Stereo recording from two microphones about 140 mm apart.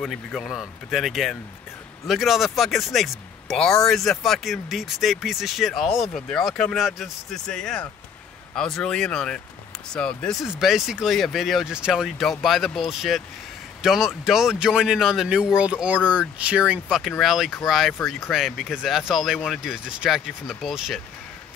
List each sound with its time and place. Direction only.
0.0 s speech: centre (ahead or behind)